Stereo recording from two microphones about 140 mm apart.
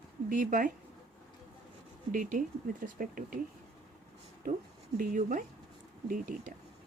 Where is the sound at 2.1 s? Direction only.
65° right (ahead or behind).